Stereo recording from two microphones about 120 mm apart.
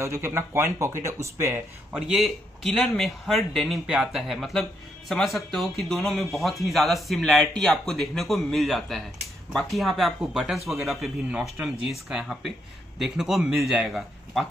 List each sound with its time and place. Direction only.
0.0 s speech: 25° right (ahead or behind)
2.0 s speech: 5° right (ahead or behind)